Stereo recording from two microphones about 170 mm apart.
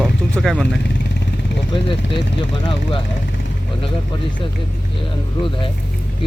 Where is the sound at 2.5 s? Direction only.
30° left (ahead or behind).